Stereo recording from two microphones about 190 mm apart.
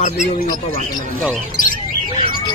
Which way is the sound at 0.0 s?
35° left (ahead or behind).